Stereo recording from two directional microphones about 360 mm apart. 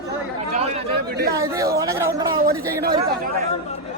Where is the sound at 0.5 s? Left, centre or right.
Centre.